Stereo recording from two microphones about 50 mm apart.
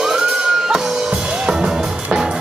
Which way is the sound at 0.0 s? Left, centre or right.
Centre.